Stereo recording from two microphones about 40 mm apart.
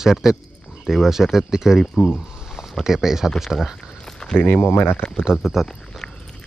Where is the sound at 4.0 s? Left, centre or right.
Centre.